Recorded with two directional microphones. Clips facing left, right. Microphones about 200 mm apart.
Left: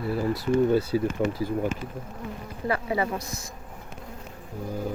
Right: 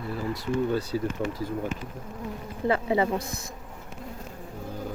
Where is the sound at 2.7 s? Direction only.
25° right (ahead or behind).